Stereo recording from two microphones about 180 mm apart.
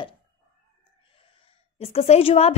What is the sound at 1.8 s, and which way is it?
Speech, 35° left (ahead or behind).